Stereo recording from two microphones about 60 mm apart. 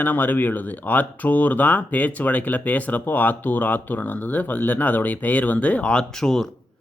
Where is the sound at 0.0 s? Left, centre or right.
Left.